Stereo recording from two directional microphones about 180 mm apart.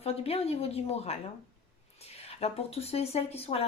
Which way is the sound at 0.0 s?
35° left (ahead or behind).